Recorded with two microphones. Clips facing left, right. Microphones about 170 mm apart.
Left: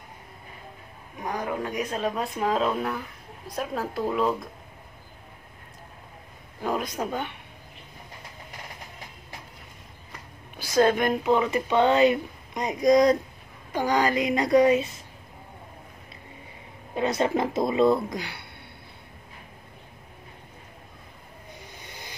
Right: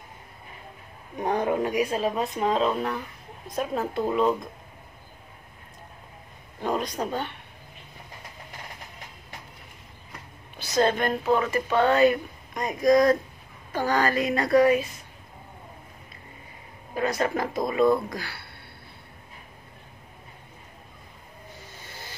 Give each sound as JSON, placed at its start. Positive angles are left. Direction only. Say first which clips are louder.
{"t": 1.2, "sound": "speech", "louder": "right 5 dB", "side_deg": -30}
{"t": 6.6, "sound": "speech", "louder": "right 1 dB", "side_deg": 5}
{"t": 10.6, "sound": "speech", "louder": "left 2 dB", "side_deg": 10}
{"t": 16.9, "sound": "speech", "louder": "left 2 dB", "side_deg": 25}
{"t": 21.8, "sound": "vehicle", "louder": "right 1 dB", "side_deg": 20}